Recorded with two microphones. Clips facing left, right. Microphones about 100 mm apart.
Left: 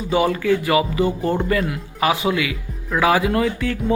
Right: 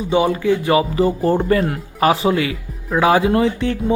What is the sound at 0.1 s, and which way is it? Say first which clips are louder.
A man's voice: right 2 dB; 25° right (ahead or behind).